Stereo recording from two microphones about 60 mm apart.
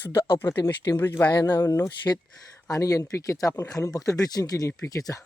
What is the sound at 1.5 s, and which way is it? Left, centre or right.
Speech, left.